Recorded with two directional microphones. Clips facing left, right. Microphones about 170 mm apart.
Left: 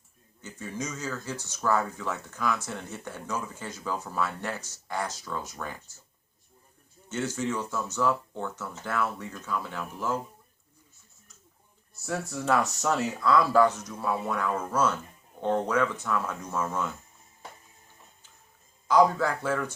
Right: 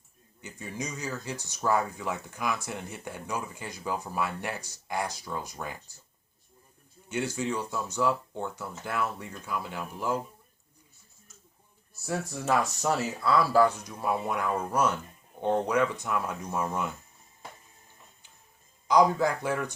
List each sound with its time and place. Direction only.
0.4 s speech: 15° right (ahead or behind)
7.1 s speech: 15° right (ahead or behind)
12.8 s speech: 10° right (ahead or behind)
18.9 s speech: 15° right (ahead or behind)